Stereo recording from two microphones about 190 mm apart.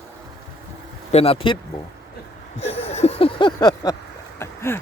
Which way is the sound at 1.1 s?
30° left (ahead or behind).